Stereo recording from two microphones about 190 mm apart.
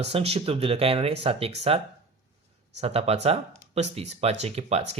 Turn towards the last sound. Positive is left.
turn(degrees=-35)  # may be behind; listen again after turning